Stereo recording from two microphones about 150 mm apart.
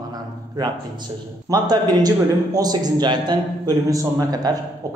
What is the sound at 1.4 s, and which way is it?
A man's voice, 25° right (ahead or behind).